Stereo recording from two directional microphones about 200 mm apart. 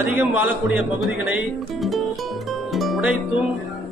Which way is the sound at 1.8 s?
Centre (ahead or behind).